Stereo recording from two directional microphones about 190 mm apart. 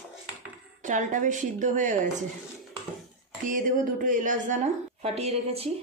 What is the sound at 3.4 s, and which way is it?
A woman's voice, 45° right (ahead or behind).